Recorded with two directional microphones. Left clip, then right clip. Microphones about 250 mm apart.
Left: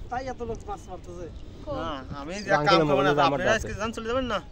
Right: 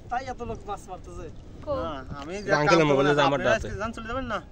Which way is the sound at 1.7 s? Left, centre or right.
Left.